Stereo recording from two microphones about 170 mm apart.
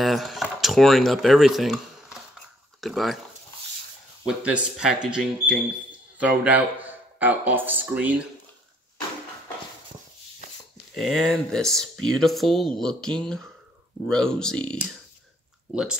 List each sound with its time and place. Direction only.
0.0 s speech: centre (ahead or behind)
4.3 s speech: 5° right (ahead or behind)
11.0 s speech: centre (ahead or behind)